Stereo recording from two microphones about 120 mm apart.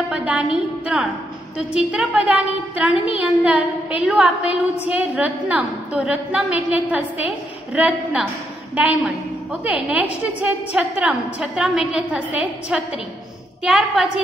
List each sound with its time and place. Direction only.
0.1 s a woman's voice: 10° right (ahead or behind)